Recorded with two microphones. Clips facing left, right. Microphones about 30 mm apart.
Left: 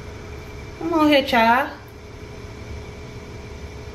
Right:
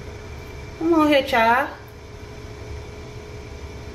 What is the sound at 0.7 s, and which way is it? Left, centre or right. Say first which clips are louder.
Speech: even; centre.